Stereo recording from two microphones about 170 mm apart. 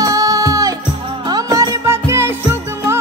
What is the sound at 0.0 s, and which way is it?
Music, 20° right (ahead or behind).